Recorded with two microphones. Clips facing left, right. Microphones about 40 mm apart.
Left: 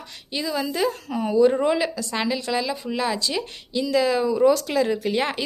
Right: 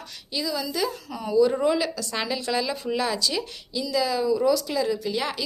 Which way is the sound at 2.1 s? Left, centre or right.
Centre.